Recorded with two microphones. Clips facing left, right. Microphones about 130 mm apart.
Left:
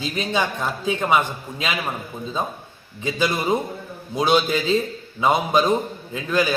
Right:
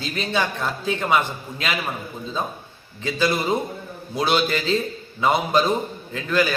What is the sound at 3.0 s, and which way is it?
A man's voice, 15° left (ahead or behind).